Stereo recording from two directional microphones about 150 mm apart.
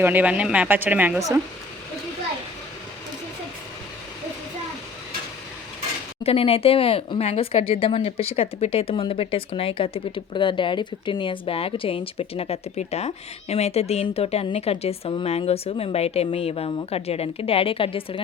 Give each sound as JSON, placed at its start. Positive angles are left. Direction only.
{"t": 0.0, "sound": "speech", "side_deg": -10}
{"t": 6.2, "sound": "speech", "side_deg": 40}